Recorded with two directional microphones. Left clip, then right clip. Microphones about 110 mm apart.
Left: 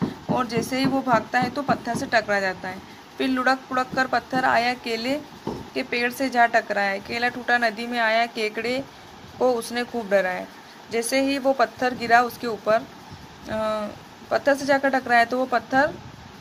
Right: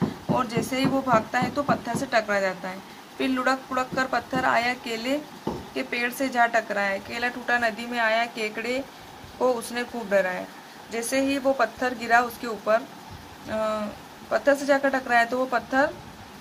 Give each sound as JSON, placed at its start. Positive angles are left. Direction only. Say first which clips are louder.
{"t": 0.3, "sound": "a woman's voice", "louder": "left 2 dB", "side_deg": 30}